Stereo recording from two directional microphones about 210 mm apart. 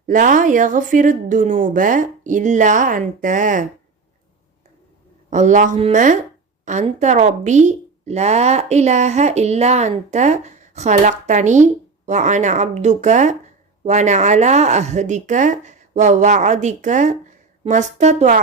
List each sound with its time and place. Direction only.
0.1 s a woman's voice: 40° right (ahead or behind)
5.3 s a woman's voice: 35° right (ahead or behind)